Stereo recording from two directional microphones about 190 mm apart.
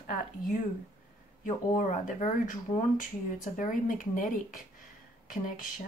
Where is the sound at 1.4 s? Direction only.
40° left (ahead or behind).